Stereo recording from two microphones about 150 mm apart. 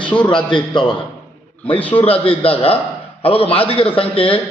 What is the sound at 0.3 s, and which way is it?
A man's voice, 30° left (ahead or behind).